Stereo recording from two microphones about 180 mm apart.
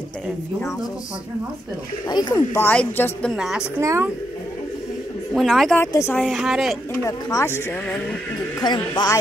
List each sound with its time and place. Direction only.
2.0 s speech: 20° left (ahead or behind); by 3.6 s 5° right (ahead or behind)
3.8 s speech: 15° right (ahead or behind)
5.3 s speech: centre (ahead or behind)
6.2 s speech: centre (ahead or behind)
6.9 s speech: 20° left (ahead or behind)